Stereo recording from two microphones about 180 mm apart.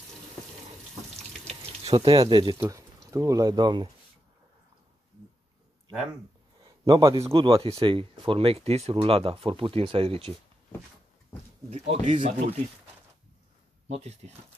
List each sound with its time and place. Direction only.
1.5 s water: 35° right (ahead or behind)
2.6 s speech: 15° right (ahead or behind)
6.6 s speech: 25° right (ahead or behind)
7.3 s speech: 30° right (ahead or behind)
11.7 s speech: 35° right (ahead or behind)
13.9 s speech: 40° right (ahead or behind)